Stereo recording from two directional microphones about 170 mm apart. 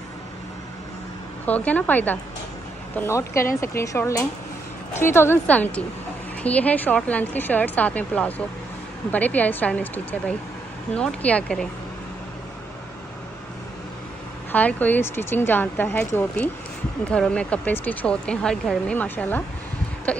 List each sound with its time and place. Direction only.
1.4 s speech: 10° left (ahead or behind)
14.5 s speech: 10° left (ahead or behind)
17.1 s speech: 5° left (ahead or behind)